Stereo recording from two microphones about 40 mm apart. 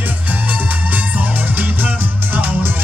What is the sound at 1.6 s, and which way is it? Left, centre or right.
Music, right.